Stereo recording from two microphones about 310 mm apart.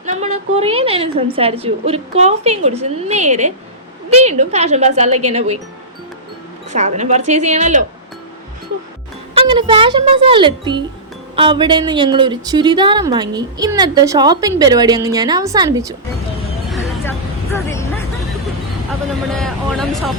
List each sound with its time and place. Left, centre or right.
0.0 s a woman's voice: right
6.7 s a woman's voice: right
9.3 s a woman's voice: centre
16.6 s vehicle: centre
17.1 s a sound: centre
19.3 s speech: centre